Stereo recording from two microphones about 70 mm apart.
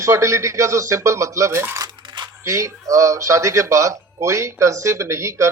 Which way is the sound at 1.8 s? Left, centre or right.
Right.